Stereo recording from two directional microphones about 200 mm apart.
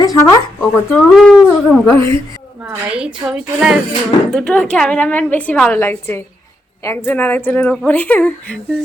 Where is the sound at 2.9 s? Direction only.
5° right (ahead or behind).